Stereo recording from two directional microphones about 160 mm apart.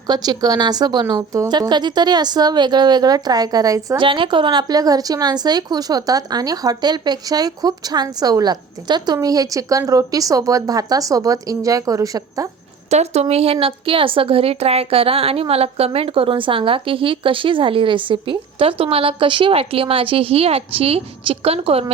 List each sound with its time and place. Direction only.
0.1 s a woman's voice: 25° right (ahead or behind)
4.0 s a woman's voice: 30° right (ahead or behind)
12.9 s speech: 40° right (ahead or behind)